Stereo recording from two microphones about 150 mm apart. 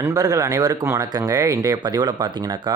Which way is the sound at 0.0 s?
25° right (ahead or behind).